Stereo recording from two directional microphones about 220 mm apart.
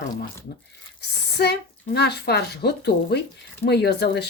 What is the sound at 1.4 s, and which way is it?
Speech, 50° left (ahead or behind).